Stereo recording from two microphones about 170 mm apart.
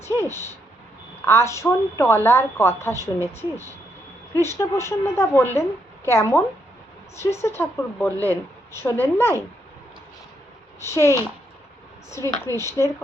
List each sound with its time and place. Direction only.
0.2 s a woman's voice: 15° left (ahead or behind)
10.8 s a woman's voice: 15° left (ahead or behind)